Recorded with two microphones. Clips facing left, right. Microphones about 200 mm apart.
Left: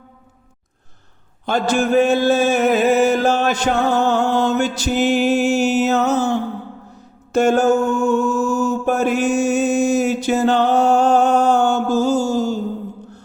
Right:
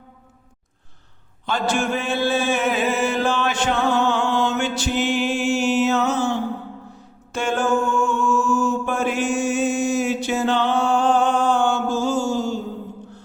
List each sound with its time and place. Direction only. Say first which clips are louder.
1.5 s mantra: left 5 dB; 40° left (ahead or behind)
7.3 s mantra: left 7 dB; 40° left (ahead or behind)